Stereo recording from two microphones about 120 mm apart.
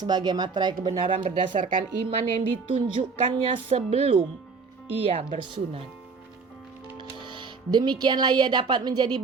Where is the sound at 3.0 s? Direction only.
70° right (ahead or behind); by 5.8 s 50° right (ahead or behind).